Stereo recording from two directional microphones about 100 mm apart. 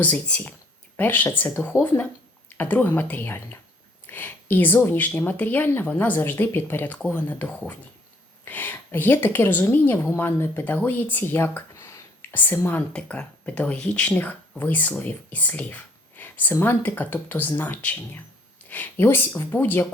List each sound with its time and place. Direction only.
0.0 s speech: 15° left (ahead or behind)
12.9 s speech: 10° left (ahead or behind)